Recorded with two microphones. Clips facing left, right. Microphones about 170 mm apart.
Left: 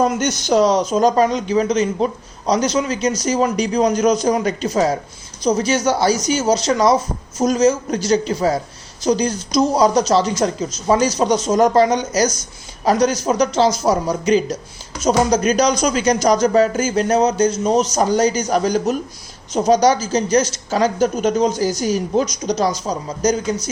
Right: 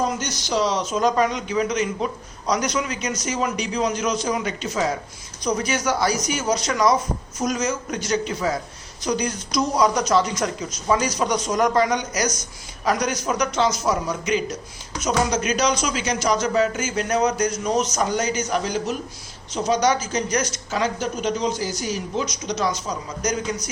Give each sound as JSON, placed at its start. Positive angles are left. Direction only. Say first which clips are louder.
{"t": 0.0, "sound": "a woman's voice", "louder": "left 7 dB", "side_deg": 55}
{"t": 5.5, "sound": "a woman's voice", "louder": "left 6 dB", "side_deg": 25}